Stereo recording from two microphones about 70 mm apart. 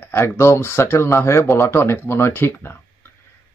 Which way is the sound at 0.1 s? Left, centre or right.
Left.